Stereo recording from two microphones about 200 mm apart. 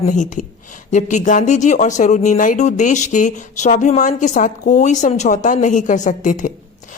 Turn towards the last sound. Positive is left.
turn(degrees=40)  # may be behind; listen again after turning